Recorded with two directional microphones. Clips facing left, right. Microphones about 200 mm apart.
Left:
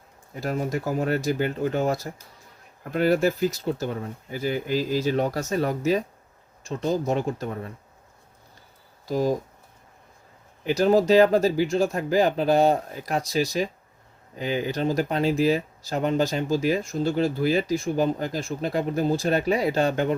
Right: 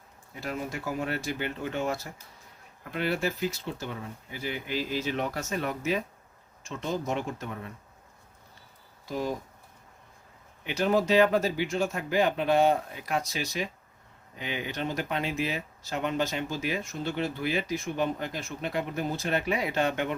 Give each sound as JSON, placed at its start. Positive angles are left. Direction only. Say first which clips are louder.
{"t": 0.3, "sound": "speech", "louder": "left 7 dB", "side_deg": 40}
{"t": 9.0, "sound": "speech", "louder": "left 8 dB", "side_deg": 40}
{"t": 10.6, "sound": "speech", "louder": "left 6 dB", "side_deg": 35}